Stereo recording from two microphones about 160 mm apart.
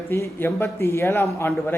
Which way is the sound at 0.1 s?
15° left (ahead or behind).